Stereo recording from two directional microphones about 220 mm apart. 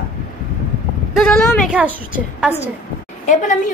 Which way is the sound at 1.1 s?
5° left (ahead or behind).